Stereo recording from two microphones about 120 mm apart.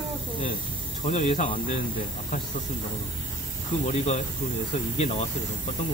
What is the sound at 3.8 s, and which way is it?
Speech, 75° left (ahead or behind).